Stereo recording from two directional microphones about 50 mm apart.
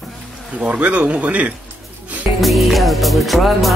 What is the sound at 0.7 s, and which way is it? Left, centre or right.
Speech, right.